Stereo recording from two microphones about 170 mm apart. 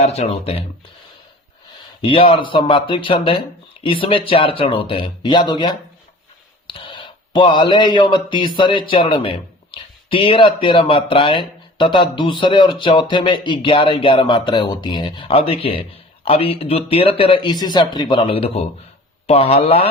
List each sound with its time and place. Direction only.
0.0 s speech: 35° left (ahead or behind)
2.0 s speech: 30° left (ahead or behind)